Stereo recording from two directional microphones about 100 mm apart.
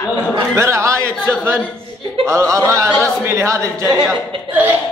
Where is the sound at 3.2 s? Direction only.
30° right (ahead or behind).